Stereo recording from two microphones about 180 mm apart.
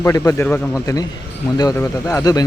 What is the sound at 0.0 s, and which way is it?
Speech, 15° left (ahead or behind).